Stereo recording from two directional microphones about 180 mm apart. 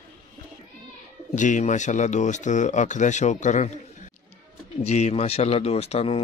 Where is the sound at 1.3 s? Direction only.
45° left (ahead or behind).